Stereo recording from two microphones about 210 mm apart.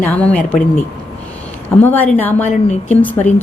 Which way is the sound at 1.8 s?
10° left (ahead or behind).